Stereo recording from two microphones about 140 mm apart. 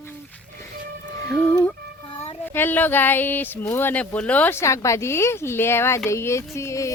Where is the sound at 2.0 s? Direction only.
35° left (ahead or behind).